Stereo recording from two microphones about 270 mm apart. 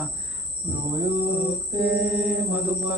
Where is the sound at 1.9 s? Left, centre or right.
Centre.